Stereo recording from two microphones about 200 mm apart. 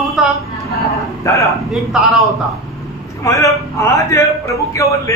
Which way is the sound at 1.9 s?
5° right (ahead or behind).